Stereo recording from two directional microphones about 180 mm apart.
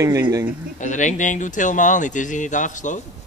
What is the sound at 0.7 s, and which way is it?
A man's voice, 45° left (ahead or behind).